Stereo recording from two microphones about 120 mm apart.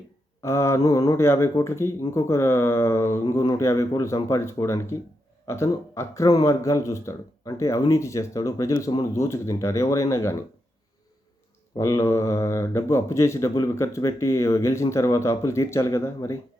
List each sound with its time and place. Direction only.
0.4 s speech: 25° left (ahead or behind)
11.8 s speech: 25° left (ahead or behind)